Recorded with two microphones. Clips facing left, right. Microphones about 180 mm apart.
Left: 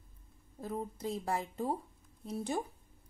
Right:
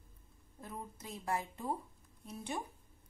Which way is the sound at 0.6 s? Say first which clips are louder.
Left 9 dB; 35° left (ahead or behind).